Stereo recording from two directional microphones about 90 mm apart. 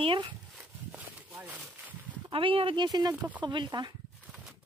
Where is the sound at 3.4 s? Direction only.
55° right (ahead or behind).